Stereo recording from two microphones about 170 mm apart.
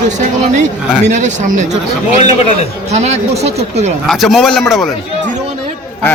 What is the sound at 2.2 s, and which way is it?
Speech, 35° left (ahead or behind).